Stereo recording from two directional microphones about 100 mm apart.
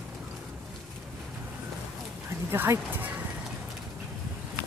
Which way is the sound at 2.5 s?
25° right (ahead or behind).